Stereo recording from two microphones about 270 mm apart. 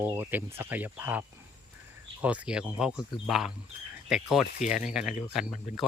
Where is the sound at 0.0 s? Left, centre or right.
Centre.